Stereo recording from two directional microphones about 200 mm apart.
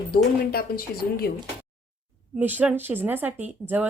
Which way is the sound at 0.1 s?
50° left (ahead or behind).